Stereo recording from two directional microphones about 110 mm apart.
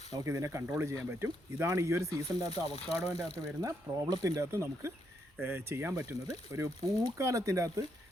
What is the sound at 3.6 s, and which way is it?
A man's voice, 35° right (ahead or behind).